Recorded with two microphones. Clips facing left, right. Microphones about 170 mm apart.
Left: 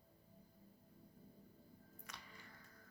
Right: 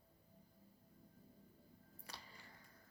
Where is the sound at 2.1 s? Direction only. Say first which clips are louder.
Right 2 dB; 35° right (ahead or behind).